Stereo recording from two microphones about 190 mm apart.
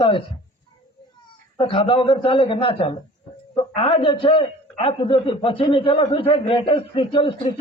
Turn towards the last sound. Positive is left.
turn(degrees=25)  # may be behind; listen again after turning